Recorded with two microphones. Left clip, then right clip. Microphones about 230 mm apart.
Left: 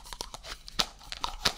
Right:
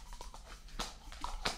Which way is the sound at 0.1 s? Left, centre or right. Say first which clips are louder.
Left 12 dB; left.